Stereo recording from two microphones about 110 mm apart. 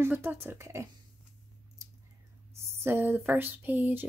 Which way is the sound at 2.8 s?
20° right (ahead or behind).